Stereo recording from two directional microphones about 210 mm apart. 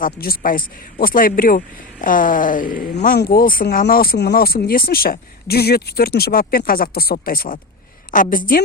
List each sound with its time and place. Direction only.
0.0 s a woman's voice: 40° left (ahead or behind)